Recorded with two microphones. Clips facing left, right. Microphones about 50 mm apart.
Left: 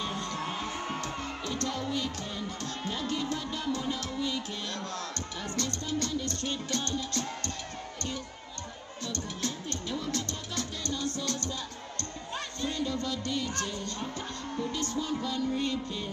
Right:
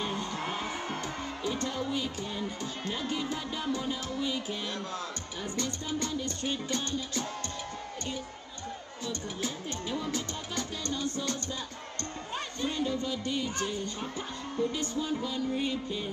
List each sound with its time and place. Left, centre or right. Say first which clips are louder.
0.0 s music: even; centre
9.0 s music: even; centre